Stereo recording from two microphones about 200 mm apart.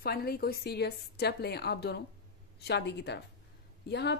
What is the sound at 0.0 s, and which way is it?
Speech, 50° left (ahead or behind).